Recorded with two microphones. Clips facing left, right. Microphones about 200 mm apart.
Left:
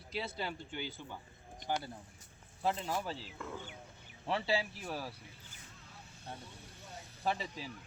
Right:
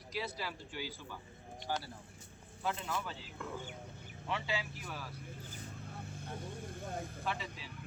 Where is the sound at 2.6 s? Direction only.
30° left (ahead or behind).